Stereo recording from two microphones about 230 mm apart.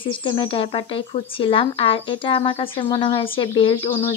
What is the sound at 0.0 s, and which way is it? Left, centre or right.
Speech, left.